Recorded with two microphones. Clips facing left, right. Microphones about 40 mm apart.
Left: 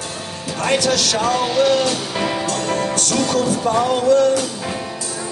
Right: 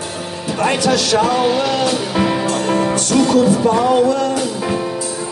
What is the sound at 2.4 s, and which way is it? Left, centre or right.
Music, right.